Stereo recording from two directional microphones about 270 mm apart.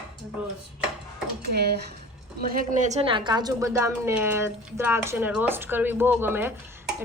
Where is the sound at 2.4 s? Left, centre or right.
Right.